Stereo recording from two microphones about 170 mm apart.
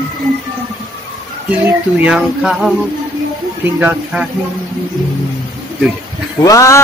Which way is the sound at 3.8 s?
10° right (ahead or behind).